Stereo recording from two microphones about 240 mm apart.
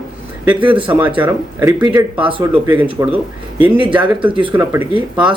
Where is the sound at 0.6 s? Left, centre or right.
Right.